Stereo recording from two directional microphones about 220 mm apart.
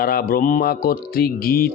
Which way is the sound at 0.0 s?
40° left (ahead or behind).